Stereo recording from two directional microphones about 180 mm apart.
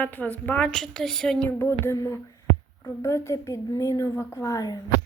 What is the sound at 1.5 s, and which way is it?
A woman's voice, 15° left (ahead or behind).